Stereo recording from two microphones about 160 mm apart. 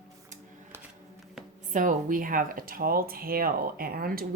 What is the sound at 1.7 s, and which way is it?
Speech, 55° right (ahead or behind).